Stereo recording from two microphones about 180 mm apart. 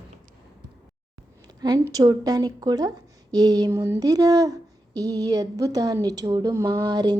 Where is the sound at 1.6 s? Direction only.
20° right (ahead or behind).